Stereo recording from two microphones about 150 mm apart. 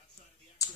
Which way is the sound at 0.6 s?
20° left (ahead or behind).